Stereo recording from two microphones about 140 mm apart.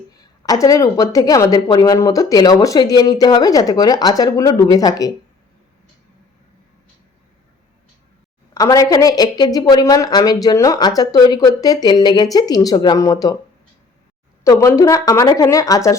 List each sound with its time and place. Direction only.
0.4 s a woman's voice: 25° left (ahead or behind)
8.5 s a woman's voice: 25° left (ahead or behind)
14.4 s a woman's voice: 20° left (ahead or behind)